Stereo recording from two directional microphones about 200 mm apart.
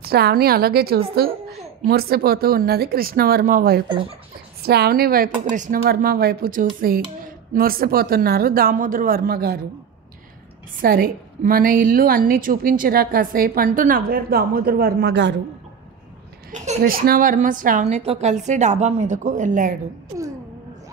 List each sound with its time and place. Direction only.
0.0 s a woman's voice: 50° right (ahead or behind)
10.8 s a woman's voice: 45° right (ahead or behind)
16.5 s a woman's voice: 35° right (ahead or behind)